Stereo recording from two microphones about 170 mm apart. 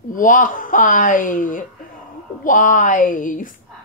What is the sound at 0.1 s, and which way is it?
Speech, 50° left (ahead or behind).